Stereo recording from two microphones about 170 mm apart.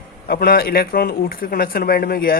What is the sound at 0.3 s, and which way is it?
Speech, 60° left (ahead or behind).